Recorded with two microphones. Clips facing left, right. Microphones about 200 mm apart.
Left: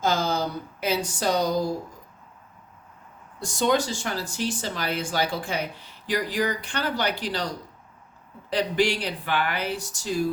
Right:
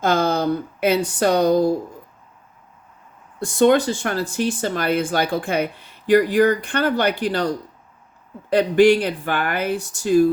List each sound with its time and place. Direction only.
0.0 s speech: 60° right (ahead or behind)
3.4 s speech: 55° right (ahead or behind)